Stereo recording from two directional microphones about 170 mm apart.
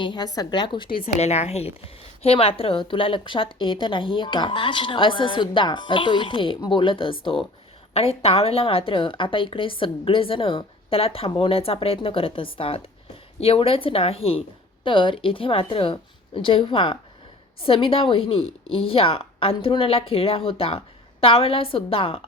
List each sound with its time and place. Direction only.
0.0 s a woman's voice: 25° left (ahead or behind)
1.2 s a woman's voice: 40° left (ahead or behind)